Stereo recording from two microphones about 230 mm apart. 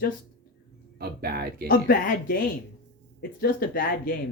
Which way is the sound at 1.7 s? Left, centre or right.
Left.